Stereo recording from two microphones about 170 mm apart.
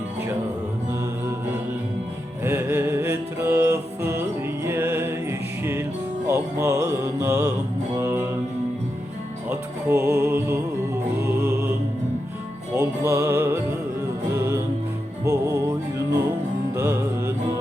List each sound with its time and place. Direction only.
2.4 s music: 15° right (ahead or behind)
9.5 s music: 15° right (ahead or behind)
12.7 s music: 15° right (ahead or behind)
16.7 s music: 15° right (ahead or behind)